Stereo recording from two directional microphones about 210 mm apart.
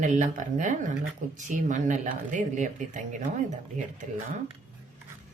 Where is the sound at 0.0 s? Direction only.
35° right (ahead or behind).